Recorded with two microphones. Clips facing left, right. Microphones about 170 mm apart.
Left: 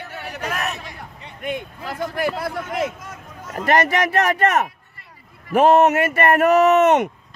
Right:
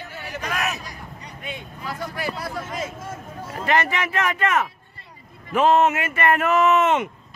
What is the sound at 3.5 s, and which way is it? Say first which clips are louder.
Speech: left 4 dB; 45° left (ahead or behind).